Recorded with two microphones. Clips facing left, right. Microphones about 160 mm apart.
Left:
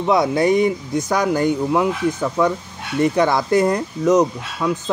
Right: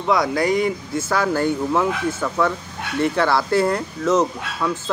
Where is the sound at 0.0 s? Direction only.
25° left (ahead or behind).